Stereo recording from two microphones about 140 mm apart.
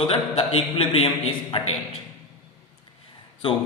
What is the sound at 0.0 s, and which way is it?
A man's voice, 40° left (ahead or behind).